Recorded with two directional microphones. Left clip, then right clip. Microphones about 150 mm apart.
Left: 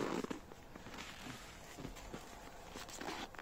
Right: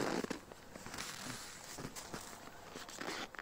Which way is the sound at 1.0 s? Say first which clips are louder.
Right 4 dB; 90° right.